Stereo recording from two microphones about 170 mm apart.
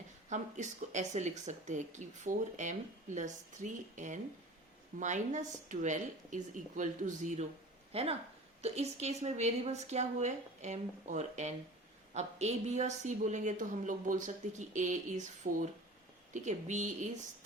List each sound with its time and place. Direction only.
0.3 s speech: 45° right (ahead or behind)
7.9 s speech: 35° right (ahead or behind)
16.3 s speech: 45° right (ahead or behind)